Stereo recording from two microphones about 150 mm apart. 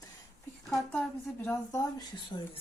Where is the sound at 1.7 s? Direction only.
25° left (ahead or behind).